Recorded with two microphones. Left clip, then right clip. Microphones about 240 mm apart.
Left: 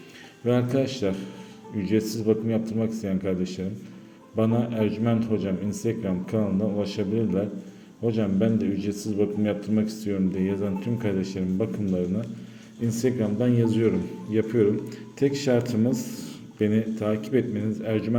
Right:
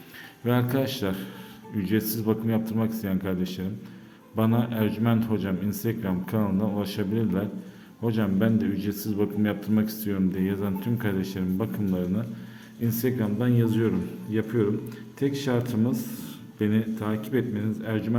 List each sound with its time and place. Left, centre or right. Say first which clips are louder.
0.4 s a man's voice: left 2 dB; centre